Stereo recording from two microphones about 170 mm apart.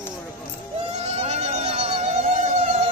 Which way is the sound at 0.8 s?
40° right (ahead or behind).